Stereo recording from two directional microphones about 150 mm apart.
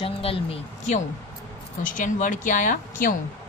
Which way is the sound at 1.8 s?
60° left (ahead or behind).